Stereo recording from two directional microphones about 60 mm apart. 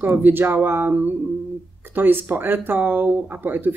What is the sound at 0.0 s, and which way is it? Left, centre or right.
Speech, right.